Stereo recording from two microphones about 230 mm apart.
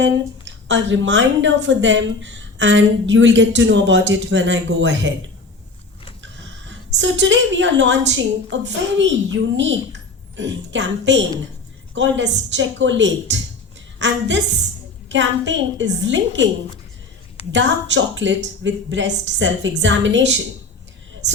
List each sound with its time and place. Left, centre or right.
0.0 s a woman's voice: right
6.2 s a woman's voice: right
17.5 s a woman's voice: right